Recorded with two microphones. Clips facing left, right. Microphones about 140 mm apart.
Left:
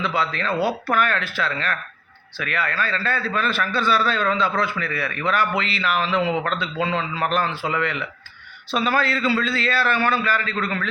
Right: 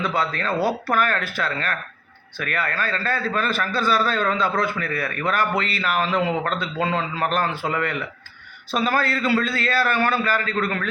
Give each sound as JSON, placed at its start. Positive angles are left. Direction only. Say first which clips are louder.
{"t": 0.0, "sound": "a man's voice", "louder": "even", "side_deg": -45}